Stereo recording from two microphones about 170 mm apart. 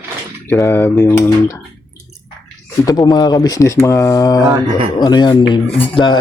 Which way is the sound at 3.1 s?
25° left (ahead or behind).